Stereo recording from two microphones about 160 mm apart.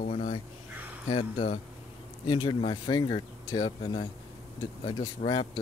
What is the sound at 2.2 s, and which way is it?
Speech, 30° left (ahead or behind).